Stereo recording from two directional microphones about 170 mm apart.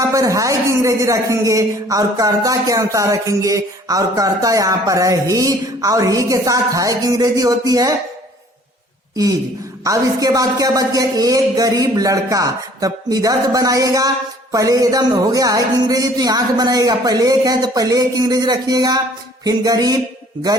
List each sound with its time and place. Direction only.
0.1 s a man's voice: 20° right (ahead or behind)
9.8 s a man's voice: 20° right (ahead or behind)